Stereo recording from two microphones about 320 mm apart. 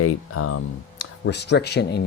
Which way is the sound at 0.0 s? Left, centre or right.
Left.